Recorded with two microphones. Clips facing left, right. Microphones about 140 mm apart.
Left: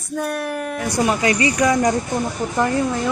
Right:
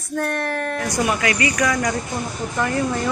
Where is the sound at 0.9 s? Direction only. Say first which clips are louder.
Left 4 dB; 30° left (ahead or behind).